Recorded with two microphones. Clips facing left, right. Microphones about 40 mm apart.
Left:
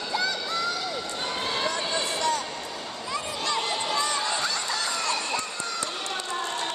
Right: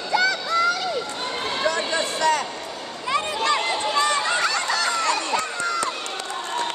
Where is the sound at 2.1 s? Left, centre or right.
Right.